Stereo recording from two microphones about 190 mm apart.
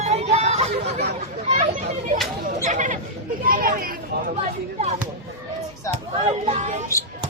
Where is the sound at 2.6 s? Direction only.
40° right (ahead or behind).